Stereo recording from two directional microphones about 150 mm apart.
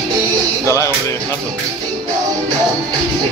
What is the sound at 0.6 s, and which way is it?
Music, 20° left (ahead or behind).